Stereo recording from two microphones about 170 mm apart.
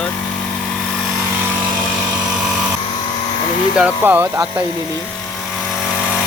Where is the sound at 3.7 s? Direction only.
10° right (ahead or behind).